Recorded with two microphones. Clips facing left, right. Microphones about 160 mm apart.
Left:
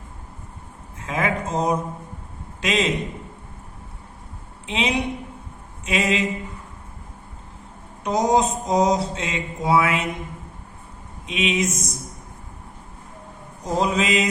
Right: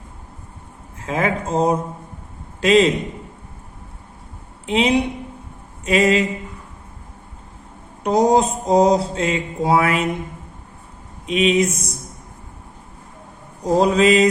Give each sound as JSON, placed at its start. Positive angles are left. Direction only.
{"t": 1.0, "sound": "mantra", "side_deg": -30}
{"t": 4.7, "sound": "mantra", "side_deg": -35}
{"t": 8.0, "sound": "mantra", "side_deg": -30}
{"t": 11.3, "sound": "mantra", "side_deg": -35}
{"t": 13.7, "sound": "mantra", "side_deg": -35}